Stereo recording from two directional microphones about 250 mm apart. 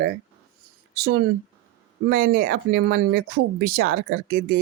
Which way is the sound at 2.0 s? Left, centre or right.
Right.